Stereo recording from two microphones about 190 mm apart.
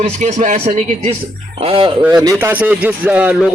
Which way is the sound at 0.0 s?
40° right (ahead or behind).